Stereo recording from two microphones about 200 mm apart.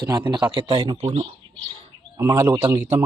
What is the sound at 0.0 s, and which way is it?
Speech, 20° right (ahead or behind).